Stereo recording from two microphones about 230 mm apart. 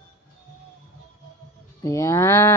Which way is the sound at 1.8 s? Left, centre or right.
Centre.